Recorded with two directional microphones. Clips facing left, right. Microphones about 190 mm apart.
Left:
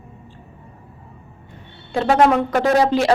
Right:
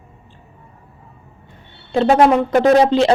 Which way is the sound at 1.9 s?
25° right (ahead or behind).